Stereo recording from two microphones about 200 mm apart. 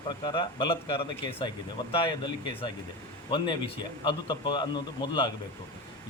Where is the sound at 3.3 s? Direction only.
25° left (ahead or behind).